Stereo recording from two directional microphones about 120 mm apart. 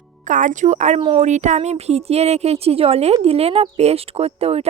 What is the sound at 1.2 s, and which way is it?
Speech, 80° right.